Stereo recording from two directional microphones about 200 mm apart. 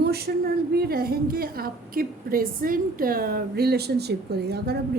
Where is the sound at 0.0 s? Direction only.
50° right (ahead or behind).